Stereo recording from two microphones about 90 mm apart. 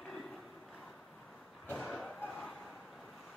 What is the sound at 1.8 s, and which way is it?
Thump, centre (ahead or behind).